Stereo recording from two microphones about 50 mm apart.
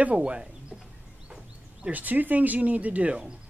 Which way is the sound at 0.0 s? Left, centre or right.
Right.